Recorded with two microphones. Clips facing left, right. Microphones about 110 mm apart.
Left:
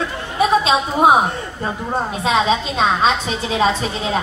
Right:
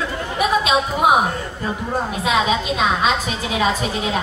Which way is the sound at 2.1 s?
25° left (ahead or behind).